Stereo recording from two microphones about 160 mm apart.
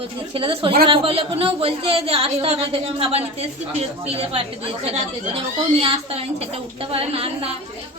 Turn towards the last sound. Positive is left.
turn(degrees=-40)  # may be behind; listen again after turning